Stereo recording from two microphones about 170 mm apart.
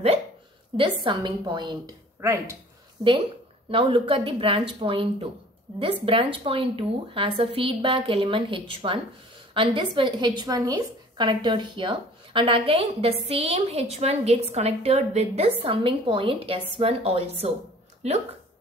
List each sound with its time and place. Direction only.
0.7 s a woman's voice: 30° right (ahead or behind)
2.2 s a woman's voice: 15° right (ahead or behind)
3.7 s a woman's voice: 30° right (ahead or behind)